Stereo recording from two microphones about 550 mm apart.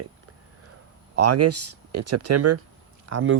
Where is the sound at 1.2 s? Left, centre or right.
Right.